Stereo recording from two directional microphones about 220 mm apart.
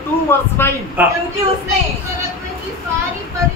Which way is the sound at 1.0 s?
10° right (ahead or behind).